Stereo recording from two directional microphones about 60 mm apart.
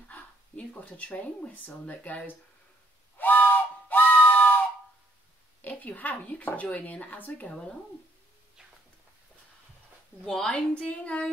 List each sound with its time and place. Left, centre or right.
0.1 s speech: left
3.2 s a sound: left
5.6 s speech: left
7.4 s a woman's voice: centre
10.2 s a woman's voice: centre